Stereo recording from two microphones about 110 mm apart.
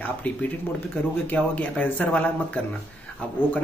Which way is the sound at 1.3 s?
15° left (ahead or behind).